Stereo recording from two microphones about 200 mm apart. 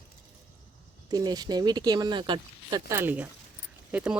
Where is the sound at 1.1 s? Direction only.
20° right (ahead or behind).